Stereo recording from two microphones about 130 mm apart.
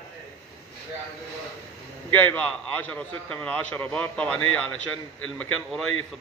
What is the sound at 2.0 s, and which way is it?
A man's voice, 15° left (ahead or behind).